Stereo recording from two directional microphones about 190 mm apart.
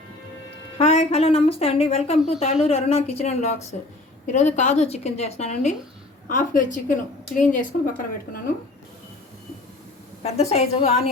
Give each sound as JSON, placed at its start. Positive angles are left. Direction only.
{"t": 0.8, "sound": "a woman's voice", "side_deg": 35}
{"t": 10.2, "sound": "a woman's voice", "side_deg": 35}